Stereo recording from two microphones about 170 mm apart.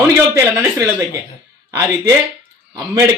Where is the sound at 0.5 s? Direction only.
10° right (ahead or behind).